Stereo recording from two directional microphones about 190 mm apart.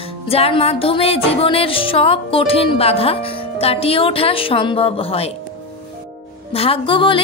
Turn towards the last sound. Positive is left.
turn(degrees=25)  # may be behind; listen again after turning